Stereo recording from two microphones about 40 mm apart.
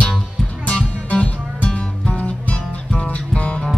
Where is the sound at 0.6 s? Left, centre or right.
Left.